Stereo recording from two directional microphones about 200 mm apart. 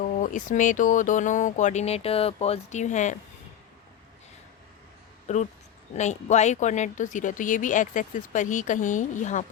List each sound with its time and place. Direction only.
0.0 s speech: 40° left (ahead or behind)
5.3 s speech: 35° left (ahead or behind)